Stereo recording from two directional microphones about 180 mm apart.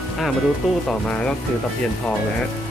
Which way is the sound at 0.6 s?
Centre (ahead or behind).